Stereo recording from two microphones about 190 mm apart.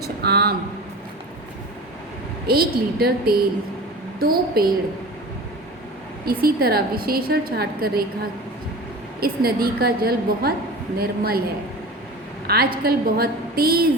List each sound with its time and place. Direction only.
0.2 s a sound: 55° right (ahead or behind)
2.5 s a woman's voice: 55° right (ahead or behind)
6.2 s a woman's voice: 55° right (ahead or behind)
9.2 s a woman's voice: 55° right (ahead or behind)
12.5 s a woman's voice: 55° right (ahead or behind)